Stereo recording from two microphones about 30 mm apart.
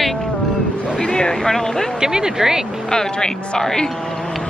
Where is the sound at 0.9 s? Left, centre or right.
Left.